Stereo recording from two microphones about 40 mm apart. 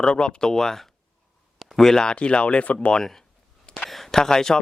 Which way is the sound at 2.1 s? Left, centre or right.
Left.